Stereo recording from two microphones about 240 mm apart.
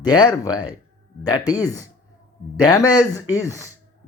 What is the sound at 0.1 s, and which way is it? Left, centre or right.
Speech, centre.